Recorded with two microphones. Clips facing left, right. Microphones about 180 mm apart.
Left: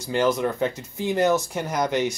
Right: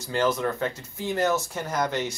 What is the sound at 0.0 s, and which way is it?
Speech, 15° left (ahead or behind).